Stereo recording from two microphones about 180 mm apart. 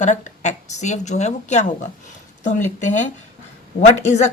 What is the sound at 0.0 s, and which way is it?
Speech, 40° left (ahead or behind).